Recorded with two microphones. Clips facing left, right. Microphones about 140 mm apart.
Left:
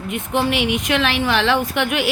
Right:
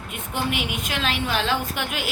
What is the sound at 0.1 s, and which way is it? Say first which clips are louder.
A woman's voice: left 7 dB; 75° left (ahead or behind).